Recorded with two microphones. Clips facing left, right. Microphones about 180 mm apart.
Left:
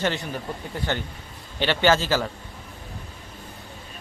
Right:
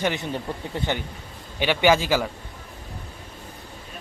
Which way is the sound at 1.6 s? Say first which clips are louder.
Right 1 dB; 10° right (ahead or behind).